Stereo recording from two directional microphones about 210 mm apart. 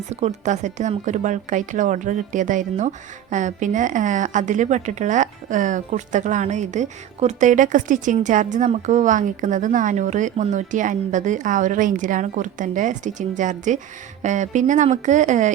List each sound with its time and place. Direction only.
0.1 s a woman's voice: 30° right (ahead or behind)